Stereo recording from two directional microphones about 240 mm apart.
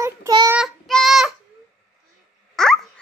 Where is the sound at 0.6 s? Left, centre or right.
Centre.